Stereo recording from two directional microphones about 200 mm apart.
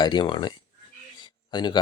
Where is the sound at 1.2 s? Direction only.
20° left (ahead or behind).